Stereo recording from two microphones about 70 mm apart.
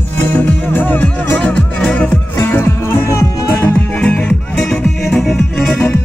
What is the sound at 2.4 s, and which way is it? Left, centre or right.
Music, left.